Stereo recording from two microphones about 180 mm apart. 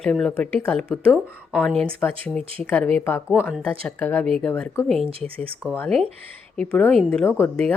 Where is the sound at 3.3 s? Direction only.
5° right (ahead or behind).